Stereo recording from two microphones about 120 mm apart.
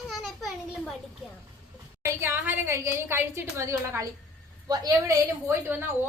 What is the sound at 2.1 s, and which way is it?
A woman's voice, 20° right (ahead or behind).